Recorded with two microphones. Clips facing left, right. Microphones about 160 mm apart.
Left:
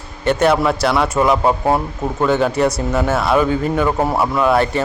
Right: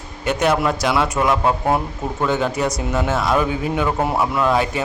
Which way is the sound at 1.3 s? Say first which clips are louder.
Left 3 dB; 15° left (ahead or behind).